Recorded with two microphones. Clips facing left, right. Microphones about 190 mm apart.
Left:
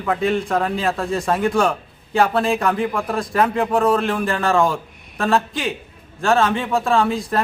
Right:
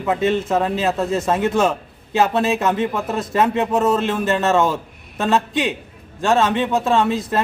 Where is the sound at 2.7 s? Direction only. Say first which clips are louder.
Right 1 dB; 5° right (ahead or behind).